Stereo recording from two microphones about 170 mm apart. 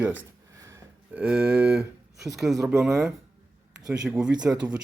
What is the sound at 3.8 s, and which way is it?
Speech, 5° right (ahead or behind).